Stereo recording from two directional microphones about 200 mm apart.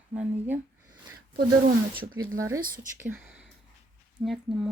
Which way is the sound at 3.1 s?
10° right (ahead or behind).